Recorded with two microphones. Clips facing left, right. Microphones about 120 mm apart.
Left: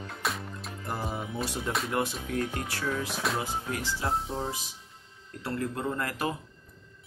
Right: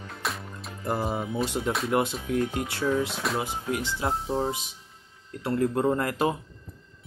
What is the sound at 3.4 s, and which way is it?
Speech, 20° right (ahead or behind).